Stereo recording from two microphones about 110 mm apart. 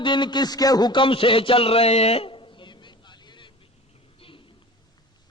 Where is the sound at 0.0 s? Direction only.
45° left (ahead or behind).